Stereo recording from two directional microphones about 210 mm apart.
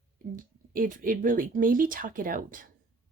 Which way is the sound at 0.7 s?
40° right (ahead or behind).